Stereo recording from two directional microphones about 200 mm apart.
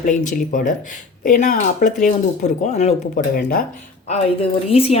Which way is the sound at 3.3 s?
45° left (ahead or behind).